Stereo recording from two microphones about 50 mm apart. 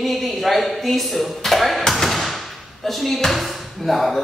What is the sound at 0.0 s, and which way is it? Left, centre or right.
A man's voice, centre.